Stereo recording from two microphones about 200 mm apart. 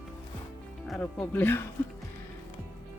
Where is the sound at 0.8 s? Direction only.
Centre (ahead or behind).